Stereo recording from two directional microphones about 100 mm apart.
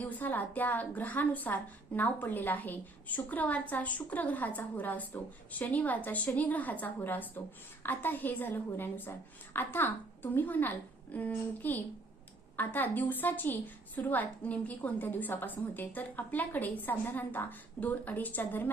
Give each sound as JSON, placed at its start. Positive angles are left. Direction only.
{"t": 0.0, "sound": "a woman's voice", "side_deg": 15}